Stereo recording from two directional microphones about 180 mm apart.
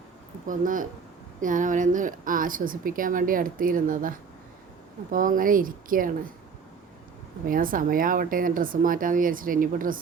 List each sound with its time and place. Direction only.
0.4 s a woman's voice: 45° right (ahead or behind)
5.1 s a woman's voice: 50° right (ahead or behind)
7.4 s a woman's voice: 50° right (ahead or behind)